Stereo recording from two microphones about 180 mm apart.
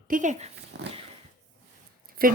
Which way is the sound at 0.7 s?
90° right.